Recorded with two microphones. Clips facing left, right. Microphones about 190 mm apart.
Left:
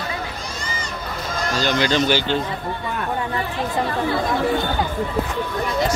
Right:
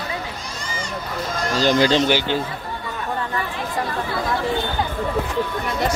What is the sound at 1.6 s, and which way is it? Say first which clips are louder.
Speech: right 3 dB; 35° right (ahead or behind).